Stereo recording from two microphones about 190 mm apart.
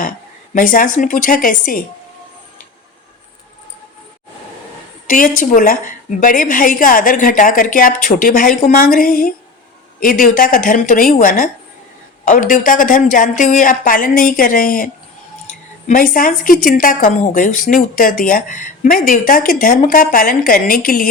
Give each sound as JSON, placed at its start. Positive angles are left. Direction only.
{"t": 0.5, "sound": "speech", "side_deg": 45}
{"t": 5.0, "sound": "a woman's voice", "side_deg": 45}
{"t": 15.9, "sound": "speech", "side_deg": 45}